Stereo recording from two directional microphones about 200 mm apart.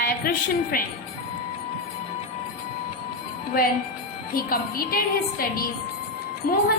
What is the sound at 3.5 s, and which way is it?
A woman's voice, 50° left (ahead or behind).